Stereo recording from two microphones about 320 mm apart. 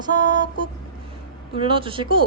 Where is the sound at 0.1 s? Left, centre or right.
Centre.